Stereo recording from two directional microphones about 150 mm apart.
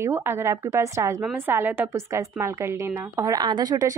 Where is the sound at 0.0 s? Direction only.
15° right (ahead or behind).